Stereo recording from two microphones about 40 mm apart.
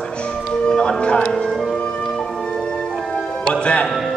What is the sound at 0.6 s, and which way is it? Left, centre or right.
Speech, left.